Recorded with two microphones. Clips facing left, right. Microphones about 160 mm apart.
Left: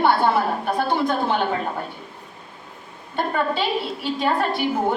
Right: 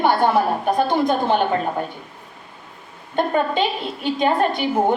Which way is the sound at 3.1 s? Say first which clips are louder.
Right 4 dB; 15° right (ahead or behind).